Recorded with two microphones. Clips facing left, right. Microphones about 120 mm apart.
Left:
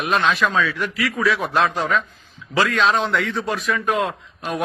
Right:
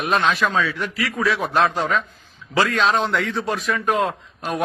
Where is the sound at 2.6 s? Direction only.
35° right (ahead or behind).